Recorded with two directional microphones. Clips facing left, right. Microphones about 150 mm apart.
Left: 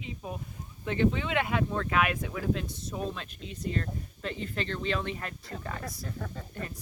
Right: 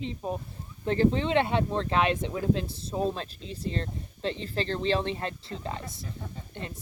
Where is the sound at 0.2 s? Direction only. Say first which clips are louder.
Right 6 dB; 35° right (ahead or behind).